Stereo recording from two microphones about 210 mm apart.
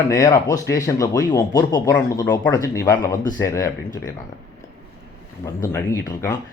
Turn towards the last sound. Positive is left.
turn(degrees=15)  # may be behind; listen again after turning